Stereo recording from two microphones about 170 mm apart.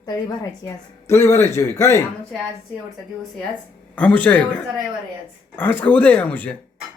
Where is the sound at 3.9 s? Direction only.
10° left (ahead or behind).